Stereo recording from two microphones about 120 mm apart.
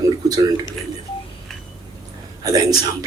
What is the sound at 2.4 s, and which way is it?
Speech, 30° right (ahead or behind).